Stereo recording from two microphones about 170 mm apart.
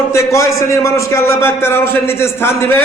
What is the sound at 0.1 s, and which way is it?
A man's voice, 15° left (ahead or behind).